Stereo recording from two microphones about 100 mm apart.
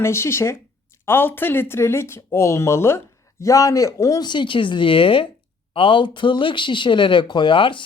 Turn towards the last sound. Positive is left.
turn(degrees=55)  # may be behind; listen again after turning